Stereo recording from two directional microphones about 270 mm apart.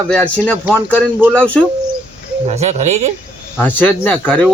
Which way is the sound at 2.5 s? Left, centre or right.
Right.